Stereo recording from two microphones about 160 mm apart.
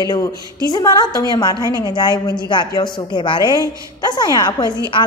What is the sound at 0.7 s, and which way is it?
Speech, 25° left (ahead or behind).